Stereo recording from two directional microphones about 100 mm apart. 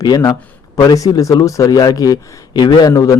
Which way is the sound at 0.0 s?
40° left (ahead or behind).